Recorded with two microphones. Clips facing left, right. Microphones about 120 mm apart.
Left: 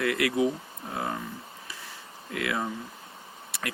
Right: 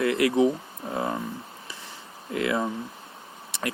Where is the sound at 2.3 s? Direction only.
30° right (ahead or behind).